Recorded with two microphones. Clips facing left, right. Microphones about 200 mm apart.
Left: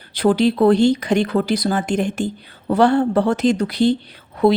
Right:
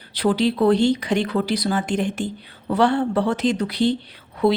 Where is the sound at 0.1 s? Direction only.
50° left (ahead or behind).